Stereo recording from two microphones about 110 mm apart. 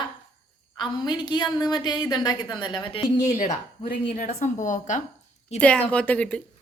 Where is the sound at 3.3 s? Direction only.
90° left.